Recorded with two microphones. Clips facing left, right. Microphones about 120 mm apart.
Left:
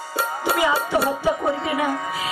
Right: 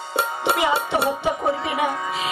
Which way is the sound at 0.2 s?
25° right (ahead or behind).